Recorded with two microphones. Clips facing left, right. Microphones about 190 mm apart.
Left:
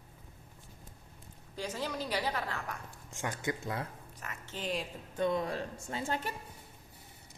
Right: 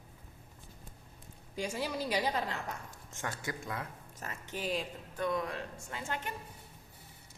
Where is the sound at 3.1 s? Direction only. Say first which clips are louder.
Left 4 dB; 15° left (ahead or behind).